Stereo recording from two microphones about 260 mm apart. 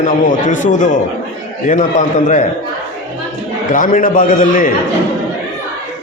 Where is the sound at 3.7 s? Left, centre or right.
Left.